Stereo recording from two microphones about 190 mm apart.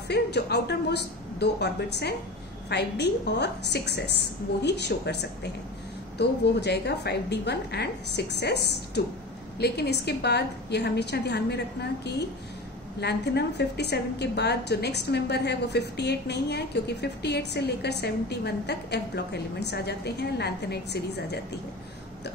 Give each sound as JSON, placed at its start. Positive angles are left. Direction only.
{"t": 0.1, "sound": "a woman's voice", "side_deg": 60}